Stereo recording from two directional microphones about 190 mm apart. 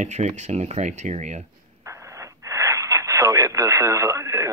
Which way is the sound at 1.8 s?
15° right (ahead or behind).